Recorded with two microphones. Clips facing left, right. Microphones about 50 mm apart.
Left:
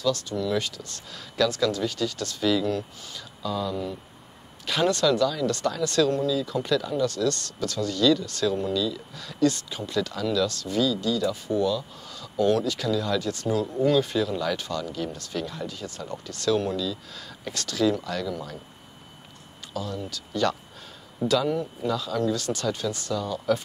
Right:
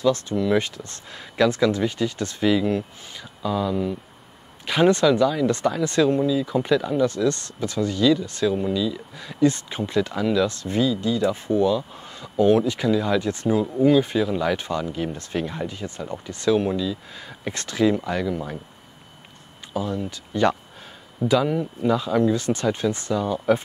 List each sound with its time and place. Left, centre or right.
0.0 s speech: right
19.7 s speech: right